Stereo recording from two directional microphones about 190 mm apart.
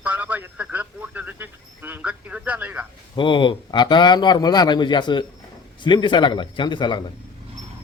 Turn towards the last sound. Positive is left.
turn(degrees=25)  # may be behind; listen again after turning